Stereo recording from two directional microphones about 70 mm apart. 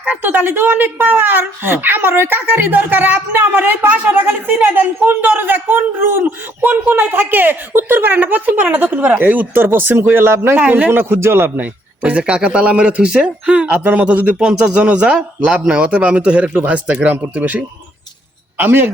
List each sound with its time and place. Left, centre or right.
0.0 s speech: right
10.6 s speech: right
10.9 s a man's voice: right